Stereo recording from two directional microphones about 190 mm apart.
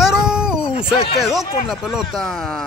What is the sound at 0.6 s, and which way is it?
Speech, 30° left (ahead or behind).